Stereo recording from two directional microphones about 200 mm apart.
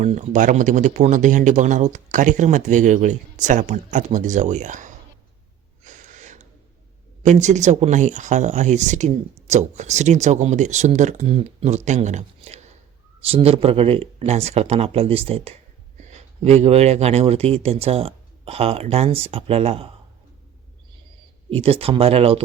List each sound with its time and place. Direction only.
0.0 s speech: 35° right (ahead or behind)
5.8 s a sound: 40° right (ahead or behind)
7.2 s speech: 35° right (ahead or behind)
21.5 s speech: 30° right (ahead or behind)